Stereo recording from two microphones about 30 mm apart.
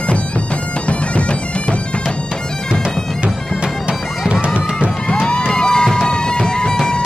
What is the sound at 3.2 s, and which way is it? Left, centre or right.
Bagpipes, right.